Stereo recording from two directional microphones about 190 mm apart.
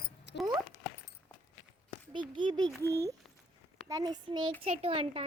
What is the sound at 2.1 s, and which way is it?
Speech, 25° right (ahead or behind).